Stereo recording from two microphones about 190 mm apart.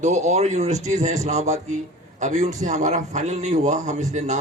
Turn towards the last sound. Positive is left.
turn(degrees=-40)  # may be behind; listen again after turning